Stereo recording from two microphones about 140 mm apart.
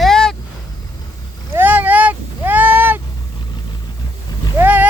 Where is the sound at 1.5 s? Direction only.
15° right (ahead or behind).